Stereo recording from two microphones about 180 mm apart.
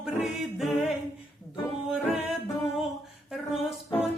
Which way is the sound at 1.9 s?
5° right (ahead or behind).